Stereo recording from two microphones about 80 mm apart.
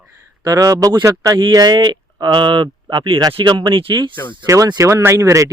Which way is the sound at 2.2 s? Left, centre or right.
Right.